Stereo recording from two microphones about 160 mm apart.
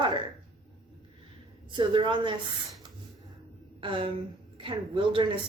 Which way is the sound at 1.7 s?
30° right (ahead or behind).